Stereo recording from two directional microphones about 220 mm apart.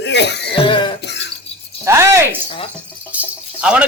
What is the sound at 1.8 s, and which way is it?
Speech, 10° right (ahead or behind).